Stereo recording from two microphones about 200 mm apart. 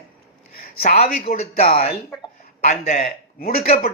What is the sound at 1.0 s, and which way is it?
Speech, 30° left (ahead or behind).